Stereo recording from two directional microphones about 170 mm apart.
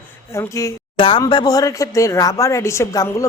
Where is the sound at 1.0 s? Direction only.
30° left (ahead or behind).